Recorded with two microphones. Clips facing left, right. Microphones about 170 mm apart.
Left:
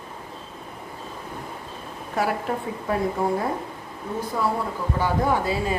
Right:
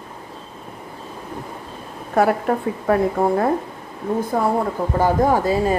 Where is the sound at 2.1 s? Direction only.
55° right (ahead or behind).